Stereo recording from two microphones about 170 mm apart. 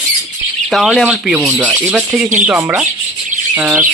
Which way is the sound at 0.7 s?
Centre (ahead or behind).